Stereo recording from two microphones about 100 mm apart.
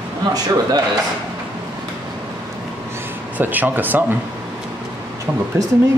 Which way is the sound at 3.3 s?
20° right (ahead or behind).